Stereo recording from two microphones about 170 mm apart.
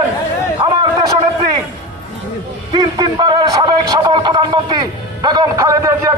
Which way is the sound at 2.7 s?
25° right (ahead or behind).